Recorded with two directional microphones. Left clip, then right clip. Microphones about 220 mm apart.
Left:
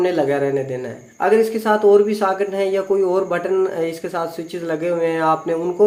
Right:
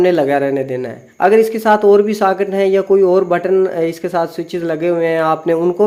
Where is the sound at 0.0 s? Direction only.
50° right (ahead or behind).